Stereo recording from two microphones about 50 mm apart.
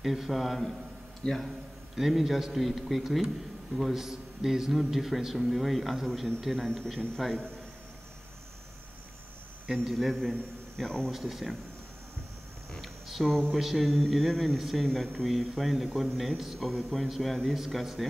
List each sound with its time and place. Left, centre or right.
0.0 s speech: centre
1.2 s a man's voice: centre
2.0 s a man's voice: centre
9.8 s speech: centre
10.8 s a man's voice: centre
11.1 s speech: centre
13.2 s a man's voice: centre
13.6 s speech: centre